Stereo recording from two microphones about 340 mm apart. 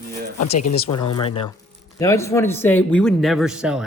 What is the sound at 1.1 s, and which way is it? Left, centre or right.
Speech, centre.